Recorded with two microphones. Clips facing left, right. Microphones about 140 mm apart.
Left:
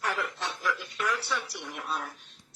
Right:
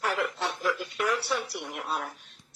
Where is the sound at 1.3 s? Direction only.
25° right (ahead or behind).